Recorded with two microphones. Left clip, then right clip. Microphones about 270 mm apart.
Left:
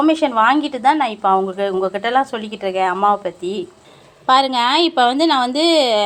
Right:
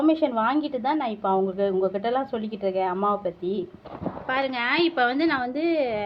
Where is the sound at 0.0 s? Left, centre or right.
Centre.